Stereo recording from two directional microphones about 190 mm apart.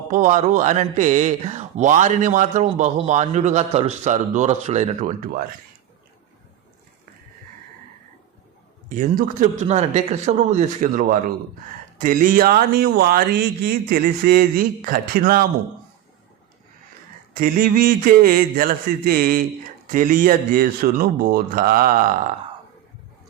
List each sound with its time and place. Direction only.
0.1 s a man's voice: 40° right (ahead or behind)
8.9 s a man's voice: 45° right (ahead or behind)
17.3 s speech: 50° right (ahead or behind)